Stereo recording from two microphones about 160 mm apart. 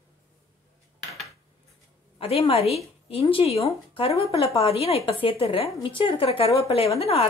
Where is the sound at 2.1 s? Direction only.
35° left (ahead or behind).